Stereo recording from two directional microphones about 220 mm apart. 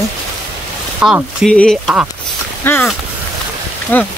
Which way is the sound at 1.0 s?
Centre (ahead or behind).